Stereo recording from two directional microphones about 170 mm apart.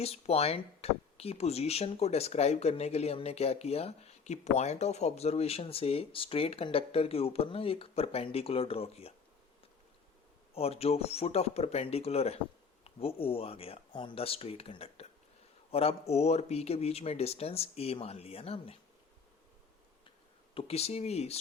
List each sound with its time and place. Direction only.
0.0 s speech: 35° left (ahead or behind)
10.5 s speech: 35° left (ahead or behind)
20.1 s a sound: 35° left (ahead or behind)